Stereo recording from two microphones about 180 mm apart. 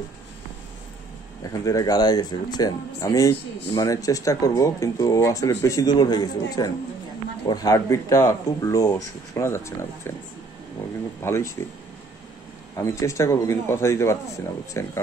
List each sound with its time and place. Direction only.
1.4 s speech: 20° left (ahead or behind)
11.2 s speech: 15° left (ahead or behind)